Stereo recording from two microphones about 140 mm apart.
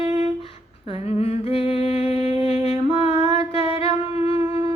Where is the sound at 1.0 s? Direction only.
45° left (ahead or behind).